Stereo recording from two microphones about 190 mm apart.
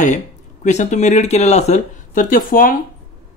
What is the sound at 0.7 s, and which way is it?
Speech, 35° left (ahead or behind).